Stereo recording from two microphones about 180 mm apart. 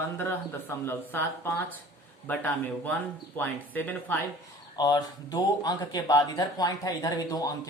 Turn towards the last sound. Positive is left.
turn(degrees=20)  # may be behind; listen again after turning